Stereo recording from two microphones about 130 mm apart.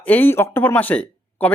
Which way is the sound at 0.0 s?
15° left (ahead or behind).